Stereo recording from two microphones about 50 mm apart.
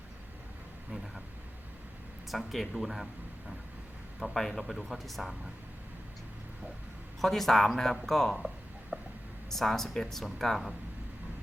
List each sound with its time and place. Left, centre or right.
2.5 s speech: centre
4.2 s speech: centre
7.2 s speech: centre
8.9 s whispering: right
9.5 s speech: centre